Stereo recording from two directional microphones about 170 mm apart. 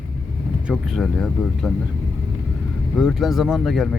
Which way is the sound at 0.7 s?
Centre (ahead or behind).